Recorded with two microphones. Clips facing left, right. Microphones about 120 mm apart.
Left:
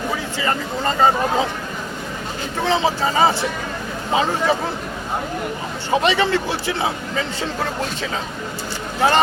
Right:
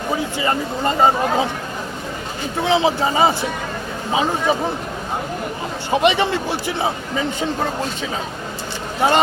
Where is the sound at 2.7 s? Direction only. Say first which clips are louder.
Right 2 dB; 20° right (ahead or behind).